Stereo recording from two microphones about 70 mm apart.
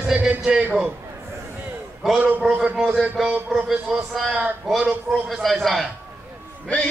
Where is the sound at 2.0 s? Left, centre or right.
Centre.